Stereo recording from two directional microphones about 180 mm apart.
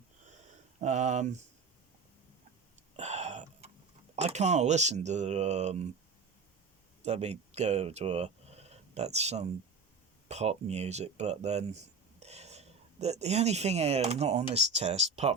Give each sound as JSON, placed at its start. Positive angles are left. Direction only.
{"t": 0.8, "sound": "speech", "side_deg": -40}
{"t": 2.9, "sound": "throat clearing", "side_deg": -40}
{"t": 4.1, "sound": "speech", "side_deg": -40}
{"t": 7.0, "sound": "speech", "side_deg": -35}